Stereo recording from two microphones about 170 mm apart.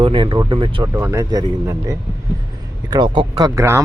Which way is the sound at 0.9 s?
15° right (ahead or behind).